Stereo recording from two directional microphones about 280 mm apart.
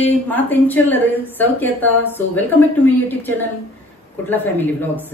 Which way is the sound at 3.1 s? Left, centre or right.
Centre.